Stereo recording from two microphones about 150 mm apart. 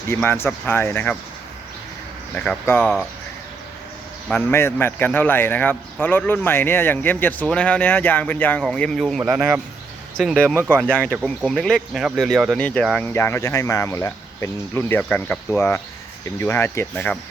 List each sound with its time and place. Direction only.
0.1 s a man's voice: 15° left (ahead or behind)
2.3 s a man's voice: 5° left (ahead or behind)
2.8 s speech: 5° right (ahead or behind)
4.3 s a man's voice: 15° left (ahead or behind)
13.1 s a man's voice: 15° left (ahead or behind)